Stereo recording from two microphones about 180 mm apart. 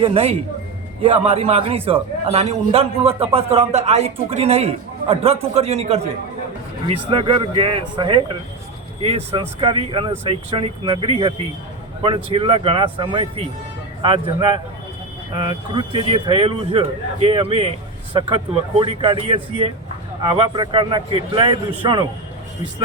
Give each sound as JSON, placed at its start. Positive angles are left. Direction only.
{"t": 0.0, "sound": "a man's voice", "side_deg": -30}